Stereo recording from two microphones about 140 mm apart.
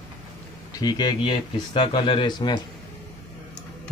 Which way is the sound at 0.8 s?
30° left (ahead or behind).